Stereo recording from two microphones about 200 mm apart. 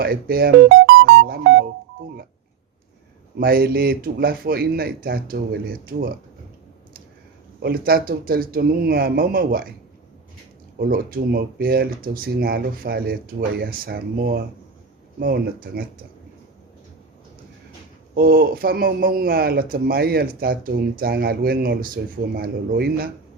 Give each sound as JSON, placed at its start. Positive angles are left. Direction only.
{"t": 0.0, "sound": "music", "side_deg": -50}
{"t": 3.4, "sound": "a man's voice", "side_deg": -50}
{"t": 7.6, "sound": "a man's voice", "side_deg": -50}
{"t": 10.8, "sound": "a man's voice", "side_deg": -45}
{"t": 18.1, "sound": "a man's voice", "side_deg": -50}